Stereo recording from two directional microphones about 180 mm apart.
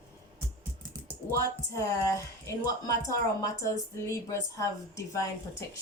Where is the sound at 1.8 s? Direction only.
15° left (ahead or behind).